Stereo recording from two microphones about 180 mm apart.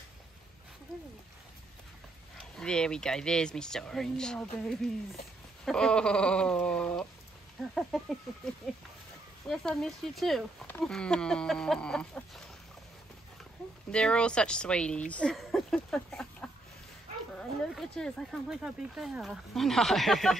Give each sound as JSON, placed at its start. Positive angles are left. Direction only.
{"t": 2.3, "sound": "speech", "side_deg": 5}
{"t": 9.5, "sound": "speech", "side_deg": 0}
{"t": 13.9, "sound": "speech", "side_deg": 5}